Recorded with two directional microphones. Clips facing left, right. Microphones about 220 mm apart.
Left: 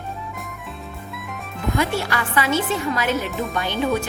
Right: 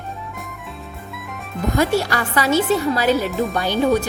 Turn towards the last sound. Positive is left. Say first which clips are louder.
# right 4 dB
turn(degrees=-40)  # may be behind; listen again after turning